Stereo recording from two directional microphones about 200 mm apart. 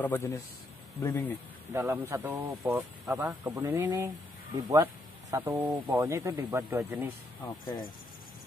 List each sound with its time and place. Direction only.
0.0 s a man's voice: 10° left (ahead or behind)
1.7 s speech: 15° right (ahead or behind)
7.6 s speech: 20° left (ahead or behind)